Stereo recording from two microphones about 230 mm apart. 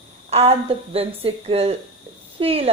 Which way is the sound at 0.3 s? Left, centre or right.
Right.